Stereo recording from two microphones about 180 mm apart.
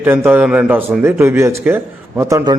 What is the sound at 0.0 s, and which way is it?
A man's voice, 10° right (ahead or behind).